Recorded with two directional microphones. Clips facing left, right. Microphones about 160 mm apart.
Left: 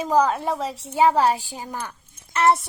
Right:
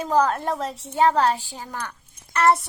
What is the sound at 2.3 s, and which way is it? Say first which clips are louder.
Speech: even; 25° left (ahead or behind).